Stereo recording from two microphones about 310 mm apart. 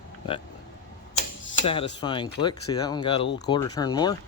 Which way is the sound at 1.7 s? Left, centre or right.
Centre.